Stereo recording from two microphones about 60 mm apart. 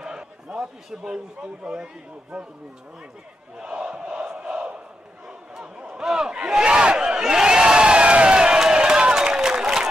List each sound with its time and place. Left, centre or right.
0.0 s a sound: centre
1.4 s a man's voice: centre
3.5 s crowd: centre
5.5 s battle cry: centre